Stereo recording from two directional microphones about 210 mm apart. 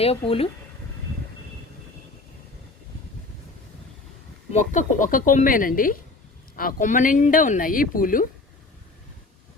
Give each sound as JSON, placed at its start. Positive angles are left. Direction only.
{"t": 0.0, "sound": "speech", "side_deg": 25}
{"t": 4.5, "sound": "speech", "side_deg": 35}